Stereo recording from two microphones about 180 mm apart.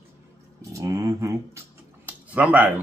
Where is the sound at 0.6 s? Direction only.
20° right (ahead or behind).